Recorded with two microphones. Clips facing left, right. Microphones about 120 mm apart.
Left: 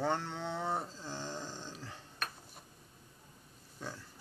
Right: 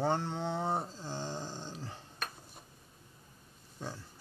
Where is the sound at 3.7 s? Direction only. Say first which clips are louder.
Right 2 dB; 30° right (ahead or behind).